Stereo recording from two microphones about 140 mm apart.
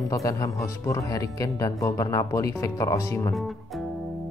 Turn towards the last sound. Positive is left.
turn(degrees=20)  # may be behind; listen again after turning